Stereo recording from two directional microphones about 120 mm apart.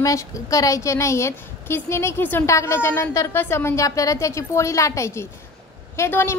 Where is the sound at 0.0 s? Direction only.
30° left (ahead or behind).